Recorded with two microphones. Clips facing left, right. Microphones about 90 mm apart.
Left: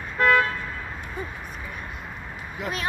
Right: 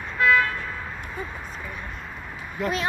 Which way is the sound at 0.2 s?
45° left (ahead or behind).